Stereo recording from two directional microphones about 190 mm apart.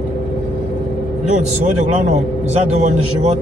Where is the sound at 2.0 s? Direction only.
35° right (ahead or behind).